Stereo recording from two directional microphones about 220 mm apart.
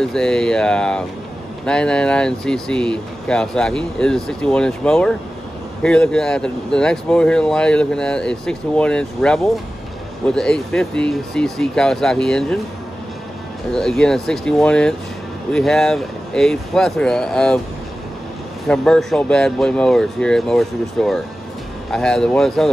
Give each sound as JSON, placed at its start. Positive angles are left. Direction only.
{"t": 0.0, "sound": "speech", "side_deg": 5}
{"t": 13.7, "sound": "speech", "side_deg": 0}
{"t": 18.7, "sound": "speech", "side_deg": 0}